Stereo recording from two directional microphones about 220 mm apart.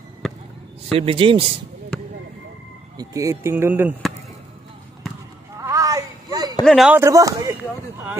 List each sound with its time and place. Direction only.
0.9 s speech: 25° right (ahead or behind)
3.0 s speech: 15° right (ahead or behind)
5.6 s a sound: 15° right (ahead or behind)
6.6 s speech: centre (ahead or behind)
7.0 s speech: 15° right (ahead or behind)